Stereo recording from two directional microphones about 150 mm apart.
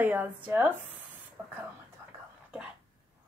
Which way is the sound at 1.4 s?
15° right (ahead or behind).